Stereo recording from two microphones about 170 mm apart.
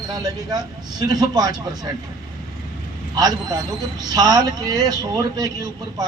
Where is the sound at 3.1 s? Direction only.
25° right (ahead or behind).